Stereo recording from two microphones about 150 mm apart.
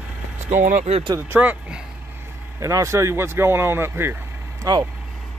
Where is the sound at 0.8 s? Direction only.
40° right (ahead or behind).